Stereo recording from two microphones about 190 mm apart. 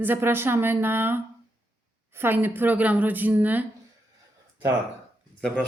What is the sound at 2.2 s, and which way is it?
A woman's voice, 10° right (ahead or behind).